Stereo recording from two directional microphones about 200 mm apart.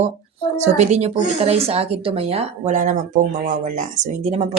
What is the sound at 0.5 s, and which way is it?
Speech, 35° right (ahead or behind).